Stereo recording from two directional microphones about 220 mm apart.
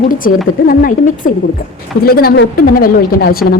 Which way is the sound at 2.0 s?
45° left (ahead or behind).